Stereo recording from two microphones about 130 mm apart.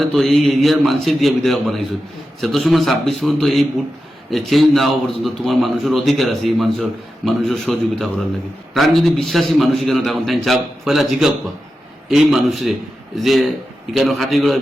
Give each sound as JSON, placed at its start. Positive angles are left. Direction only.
{"t": 0.0, "sound": "a man's voice", "side_deg": 0}